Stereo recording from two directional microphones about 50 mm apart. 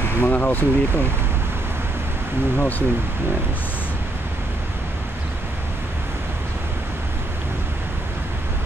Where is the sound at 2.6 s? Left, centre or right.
Left.